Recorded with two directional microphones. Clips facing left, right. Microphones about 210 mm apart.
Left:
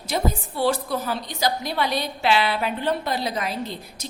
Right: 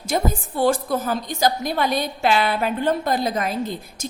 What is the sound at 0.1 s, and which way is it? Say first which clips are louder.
A woman's voice: right 2 dB; 45° right (ahead or behind).